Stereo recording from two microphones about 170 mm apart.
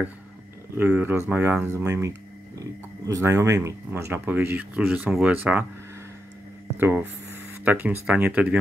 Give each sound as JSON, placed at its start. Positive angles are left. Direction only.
{"t": 0.7, "sound": "speech", "side_deg": -10}
{"t": 6.8, "sound": "speech", "side_deg": -10}